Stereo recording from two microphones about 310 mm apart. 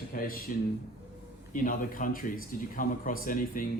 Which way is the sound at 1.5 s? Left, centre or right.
Left.